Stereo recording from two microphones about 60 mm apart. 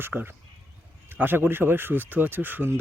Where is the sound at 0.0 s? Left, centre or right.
Right.